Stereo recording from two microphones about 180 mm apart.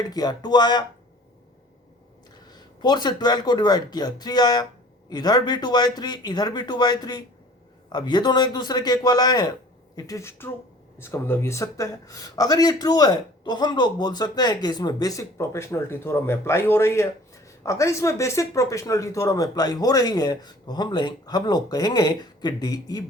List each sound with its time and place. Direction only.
0.0 s speech: 20° left (ahead or behind)
2.5 s speech: 25° left (ahead or behind)